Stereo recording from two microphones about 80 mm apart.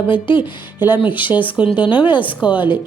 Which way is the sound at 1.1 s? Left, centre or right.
Left.